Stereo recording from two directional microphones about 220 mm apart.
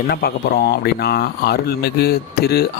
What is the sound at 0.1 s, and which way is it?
Speech, 45° left (ahead or behind).